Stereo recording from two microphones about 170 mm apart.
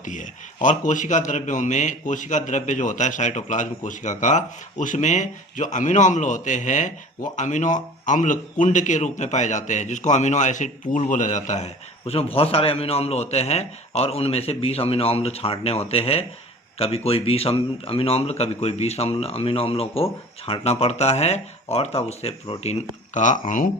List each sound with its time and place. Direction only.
0.0 s a man's voice: 45° left (ahead or behind)